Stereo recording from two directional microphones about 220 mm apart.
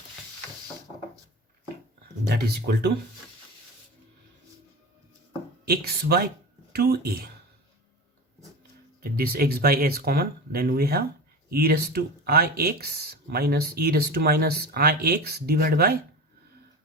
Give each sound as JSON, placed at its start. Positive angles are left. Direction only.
{"t": 2.3, "sound": "speech", "side_deg": -50}
{"t": 5.6, "sound": "speech", "side_deg": -45}
{"t": 9.0, "sound": "speech", "side_deg": -45}